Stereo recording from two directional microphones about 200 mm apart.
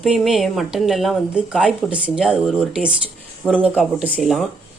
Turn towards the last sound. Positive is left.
turn(degrees=0)  # may be behind; listen again after turning